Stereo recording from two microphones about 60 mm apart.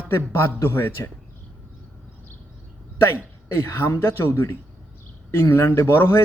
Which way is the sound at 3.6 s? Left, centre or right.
Left.